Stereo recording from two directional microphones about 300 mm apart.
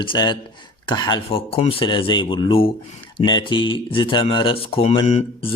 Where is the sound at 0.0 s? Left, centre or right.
Centre.